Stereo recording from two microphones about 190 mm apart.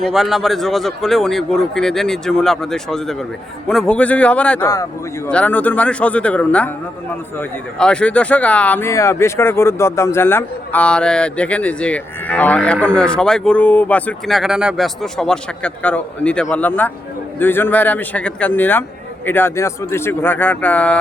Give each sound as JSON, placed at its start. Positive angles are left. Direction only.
{"t": 0.0, "sound": "a man's voice", "side_deg": 0}
{"t": 4.6, "sound": "speech", "side_deg": 20}
{"t": 5.3, "sound": "speech", "side_deg": 5}